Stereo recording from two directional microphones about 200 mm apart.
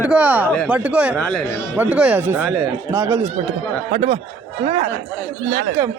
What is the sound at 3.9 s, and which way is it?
Speech, 30° right (ahead or behind).